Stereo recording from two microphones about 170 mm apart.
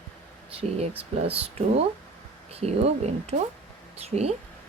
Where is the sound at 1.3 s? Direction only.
35° right (ahead or behind).